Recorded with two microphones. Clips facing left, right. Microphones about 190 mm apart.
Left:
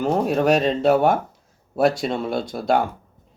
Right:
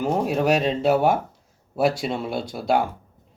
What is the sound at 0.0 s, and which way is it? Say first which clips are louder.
A man's voice: left 2 dB; 10° right (ahead or behind).